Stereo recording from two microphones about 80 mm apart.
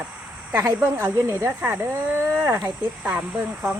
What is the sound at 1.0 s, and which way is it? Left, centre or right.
Speech, right.